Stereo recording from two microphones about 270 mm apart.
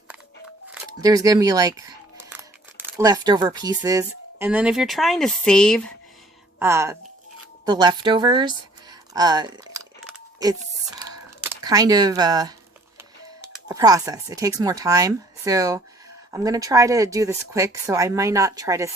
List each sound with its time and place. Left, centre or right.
0.7 s speech: centre
6.6 s speech: centre
11.6 s speech: centre
13.7 s speech: centre